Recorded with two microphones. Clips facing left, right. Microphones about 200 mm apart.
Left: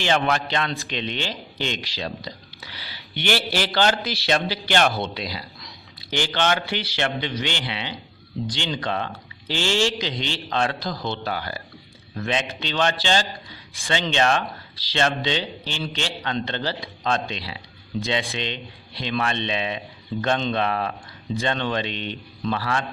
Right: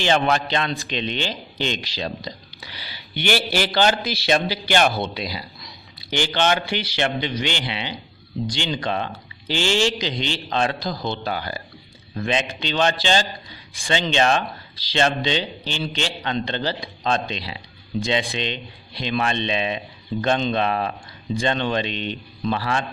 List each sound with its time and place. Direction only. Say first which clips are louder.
0.0 s a man's voice: right 2 dB; 25° right (ahead or behind)